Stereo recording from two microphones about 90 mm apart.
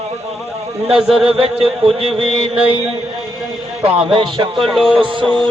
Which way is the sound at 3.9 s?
80° right.